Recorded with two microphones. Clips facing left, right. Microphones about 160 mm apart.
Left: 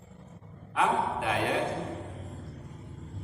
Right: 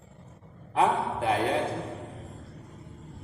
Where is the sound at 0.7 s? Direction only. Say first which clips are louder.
Right 2 dB; 35° right (ahead or behind).